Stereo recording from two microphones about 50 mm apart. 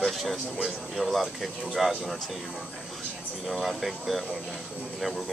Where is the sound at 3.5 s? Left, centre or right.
Centre.